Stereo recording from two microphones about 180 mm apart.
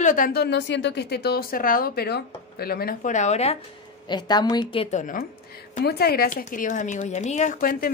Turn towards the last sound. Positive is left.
turn(degrees=50)  # may be behind; listen again after turning